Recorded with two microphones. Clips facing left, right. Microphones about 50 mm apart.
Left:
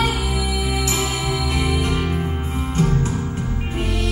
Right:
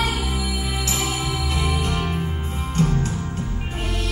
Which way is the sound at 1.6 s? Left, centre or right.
Left.